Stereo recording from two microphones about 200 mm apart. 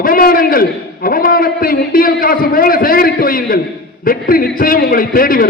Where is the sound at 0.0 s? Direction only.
45° left (ahead or behind).